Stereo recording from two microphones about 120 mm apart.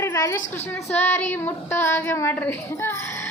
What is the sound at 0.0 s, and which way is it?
A woman's voice, 25° left (ahead or behind).